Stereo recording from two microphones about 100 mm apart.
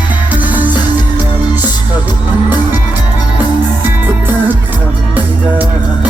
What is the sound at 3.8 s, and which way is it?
Music, 20° right (ahead or behind).